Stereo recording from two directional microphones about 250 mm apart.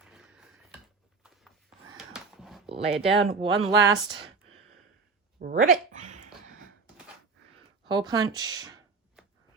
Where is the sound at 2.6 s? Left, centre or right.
Right.